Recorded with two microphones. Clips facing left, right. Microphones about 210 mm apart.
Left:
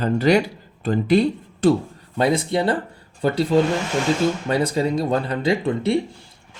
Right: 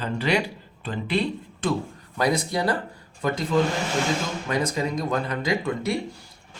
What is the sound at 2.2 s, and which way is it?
Speech, 25° left (ahead or behind).